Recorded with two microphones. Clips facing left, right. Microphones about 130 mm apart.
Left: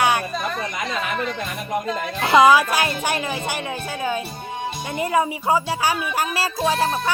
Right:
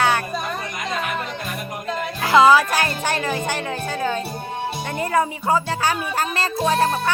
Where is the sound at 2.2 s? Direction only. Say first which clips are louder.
Even; 20° left (ahead or behind).